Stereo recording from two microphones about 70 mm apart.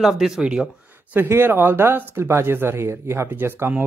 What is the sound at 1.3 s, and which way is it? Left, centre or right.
Speech, right.